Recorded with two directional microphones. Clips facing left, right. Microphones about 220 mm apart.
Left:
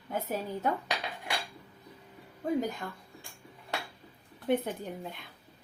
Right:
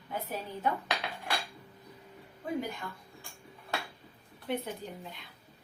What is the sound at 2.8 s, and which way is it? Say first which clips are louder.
Speech: left 2 dB; 40° left (ahead or behind).